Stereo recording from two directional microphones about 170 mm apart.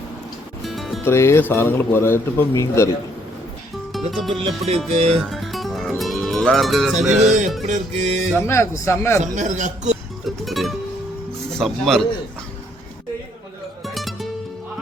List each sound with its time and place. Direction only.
0.6 s music: centre (ahead or behind)
1.0 s speech: 15° left (ahead or behind)
4.1 s a man's voice: centre (ahead or behind)
4.4 s music: 35° right (ahead or behind)
5.3 s music: centre (ahead or behind)
7.1 s speech: 45° right (ahead or behind)
8.4 s speech: 15° left (ahead or behind)
9.2 s speech: 45° right (ahead or behind)
9.9 s music: centre (ahead or behind)
11.5 s a man's voice: centre (ahead or behind)
13.8 s music: centre (ahead or behind)